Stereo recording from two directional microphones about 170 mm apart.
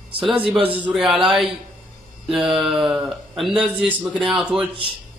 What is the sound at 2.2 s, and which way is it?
Mantra, centre (ahead or behind).